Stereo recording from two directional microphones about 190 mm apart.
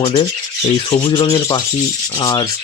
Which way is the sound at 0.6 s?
20° left (ahead or behind).